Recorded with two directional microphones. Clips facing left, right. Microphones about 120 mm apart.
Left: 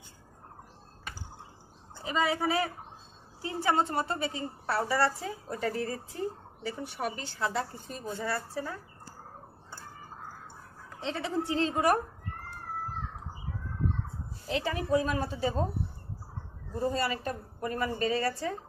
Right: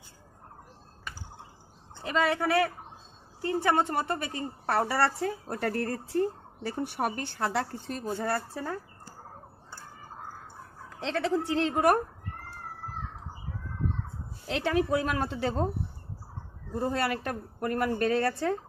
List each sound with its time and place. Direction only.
2.0 s a woman's voice: 70° right (ahead or behind)
11.0 s a woman's voice: 90° right; by 12.0 s 55° right (ahead or behind)
14.5 s a woman's voice: 75° right (ahead or behind)
16.7 s a woman's voice: 65° right (ahead or behind)